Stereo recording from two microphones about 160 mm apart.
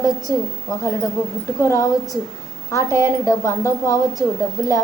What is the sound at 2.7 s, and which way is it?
A woman's voice, 20° left (ahead or behind).